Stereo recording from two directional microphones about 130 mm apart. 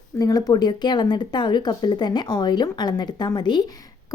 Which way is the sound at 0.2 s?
30° left (ahead or behind).